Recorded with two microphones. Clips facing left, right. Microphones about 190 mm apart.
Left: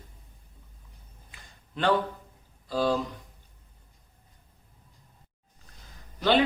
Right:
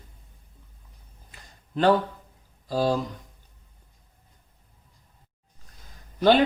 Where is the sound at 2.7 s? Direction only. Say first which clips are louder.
Right 2 dB; 40° right (ahead or behind).